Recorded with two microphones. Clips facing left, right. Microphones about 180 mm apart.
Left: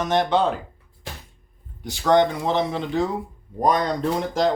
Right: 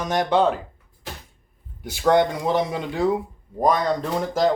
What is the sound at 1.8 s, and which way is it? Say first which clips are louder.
Speech: even; 10° right (ahead or behind).